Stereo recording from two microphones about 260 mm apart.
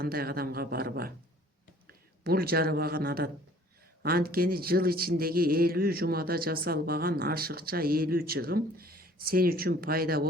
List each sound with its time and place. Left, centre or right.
0.0 s speech: right